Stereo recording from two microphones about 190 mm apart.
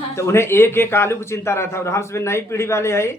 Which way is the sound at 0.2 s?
15° left (ahead or behind).